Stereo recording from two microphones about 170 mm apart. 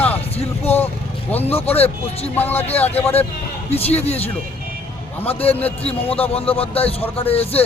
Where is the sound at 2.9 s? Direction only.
35° left (ahead or behind).